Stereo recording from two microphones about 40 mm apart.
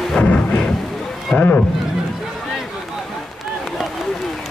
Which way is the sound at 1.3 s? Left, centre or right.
Left.